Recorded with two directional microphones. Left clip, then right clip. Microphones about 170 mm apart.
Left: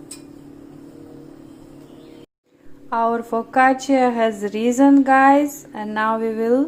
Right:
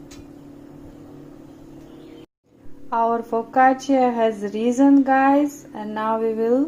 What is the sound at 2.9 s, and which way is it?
A woman's voice, centre (ahead or behind).